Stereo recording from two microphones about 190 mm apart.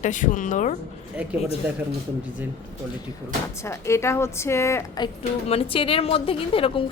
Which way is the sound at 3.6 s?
15° left (ahead or behind).